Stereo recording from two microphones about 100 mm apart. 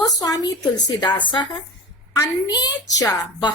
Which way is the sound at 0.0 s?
40° left (ahead or behind).